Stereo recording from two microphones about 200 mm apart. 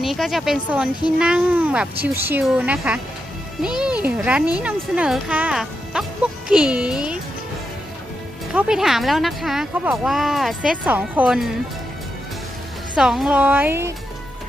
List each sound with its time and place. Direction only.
0.0 s a child's voice: centre (ahead or behind)
8.5 s speech: 5° right (ahead or behind)
13.0 s speech: 5° right (ahead or behind)